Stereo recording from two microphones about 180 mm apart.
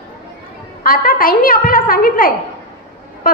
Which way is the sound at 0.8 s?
50° left (ahead or behind).